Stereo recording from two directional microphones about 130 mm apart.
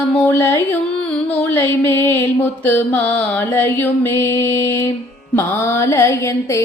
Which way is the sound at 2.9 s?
15° left (ahead or behind).